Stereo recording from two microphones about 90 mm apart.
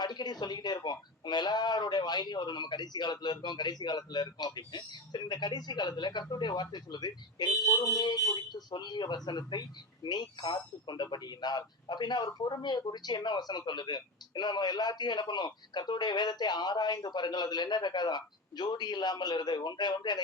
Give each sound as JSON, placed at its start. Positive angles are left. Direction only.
{"t": 0.0, "sound": "speech", "side_deg": 50}